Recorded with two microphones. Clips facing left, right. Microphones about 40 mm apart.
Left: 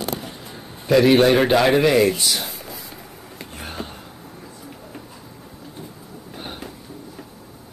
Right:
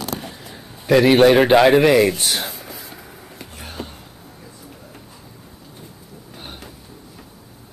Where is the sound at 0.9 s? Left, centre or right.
Right.